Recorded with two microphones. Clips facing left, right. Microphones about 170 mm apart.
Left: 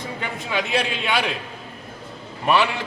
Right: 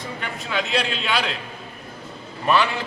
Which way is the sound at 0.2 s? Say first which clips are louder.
Left 1 dB; 15° left (ahead or behind).